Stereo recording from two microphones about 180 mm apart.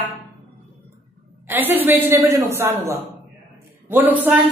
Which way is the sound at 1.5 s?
10° right (ahead or behind).